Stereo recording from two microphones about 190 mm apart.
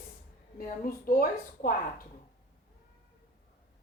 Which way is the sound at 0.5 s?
50° left (ahead or behind).